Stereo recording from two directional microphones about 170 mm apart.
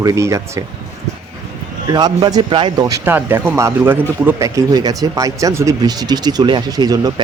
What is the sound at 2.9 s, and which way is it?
Speech, 15° right (ahead or behind).